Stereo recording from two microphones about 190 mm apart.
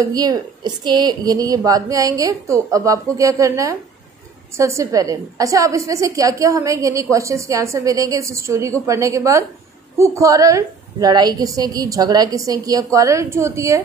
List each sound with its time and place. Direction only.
0.0 s a woman's voice: 20° right (ahead or behind)